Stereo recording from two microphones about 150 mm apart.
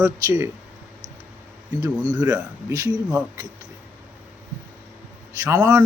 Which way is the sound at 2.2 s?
15° right (ahead or behind).